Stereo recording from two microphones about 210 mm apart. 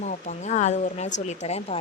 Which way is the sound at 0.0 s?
35° left (ahead or behind).